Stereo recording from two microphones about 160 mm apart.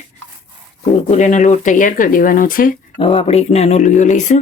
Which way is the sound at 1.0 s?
45° left (ahead or behind).